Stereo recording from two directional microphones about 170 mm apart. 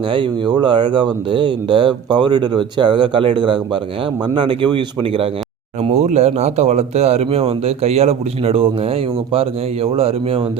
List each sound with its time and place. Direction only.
0.1 s speech: 25° right (ahead or behind)
5.8 s speech: 40° right (ahead or behind)